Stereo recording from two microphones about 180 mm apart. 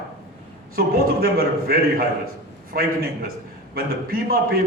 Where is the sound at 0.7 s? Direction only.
55° right (ahead or behind).